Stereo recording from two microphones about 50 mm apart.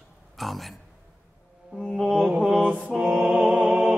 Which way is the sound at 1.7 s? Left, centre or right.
Centre.